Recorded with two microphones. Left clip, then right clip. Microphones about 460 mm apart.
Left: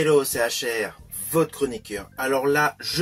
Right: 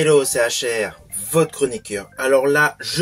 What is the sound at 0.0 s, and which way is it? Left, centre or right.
Speech, left.